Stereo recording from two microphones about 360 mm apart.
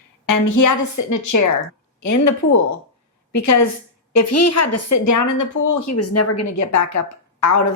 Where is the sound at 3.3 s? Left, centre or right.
Left.